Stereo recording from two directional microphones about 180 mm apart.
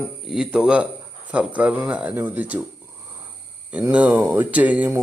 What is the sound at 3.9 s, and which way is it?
Speech, 10° right (ahead or behind).